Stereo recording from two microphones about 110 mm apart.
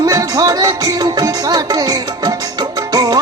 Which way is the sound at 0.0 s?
35° right (ahead or behind).